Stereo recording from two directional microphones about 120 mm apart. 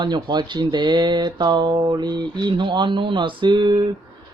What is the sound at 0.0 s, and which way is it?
Speech, 40° right (ahead or behind).